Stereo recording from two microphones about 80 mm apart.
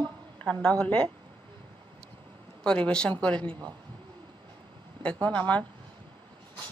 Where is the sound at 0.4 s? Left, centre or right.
Centre.